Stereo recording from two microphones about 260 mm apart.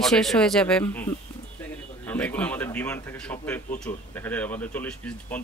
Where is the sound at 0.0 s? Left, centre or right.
Centre.